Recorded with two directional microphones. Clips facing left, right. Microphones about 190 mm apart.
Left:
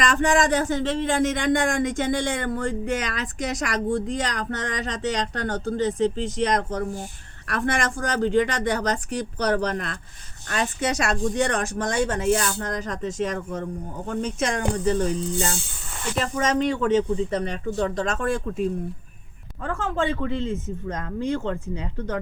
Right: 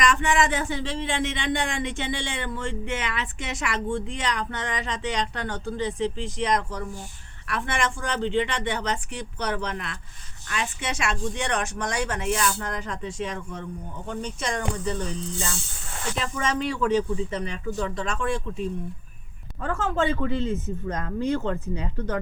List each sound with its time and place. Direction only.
0.0 s speech: 35° left (ahead or behind)
19.6 s speech: 35° left (ahead or behind)